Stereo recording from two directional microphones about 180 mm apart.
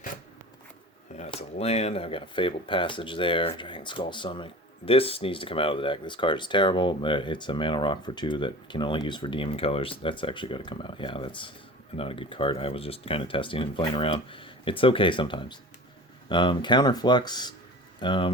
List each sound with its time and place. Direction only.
1.1 s speech: 35° left (ahead or behind)